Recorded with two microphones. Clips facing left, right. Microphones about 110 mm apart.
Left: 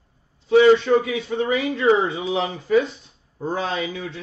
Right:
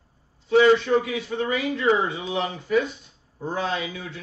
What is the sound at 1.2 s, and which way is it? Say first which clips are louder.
A man's voice: left 3 dB; 30° left (ahead or behind).